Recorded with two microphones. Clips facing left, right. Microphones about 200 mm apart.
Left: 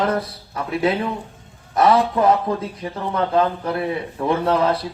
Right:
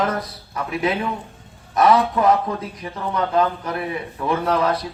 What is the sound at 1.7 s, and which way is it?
Speech, 30° left (ahead or behind).